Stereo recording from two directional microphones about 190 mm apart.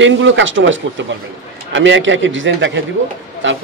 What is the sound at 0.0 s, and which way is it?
A man's voice, 80° right.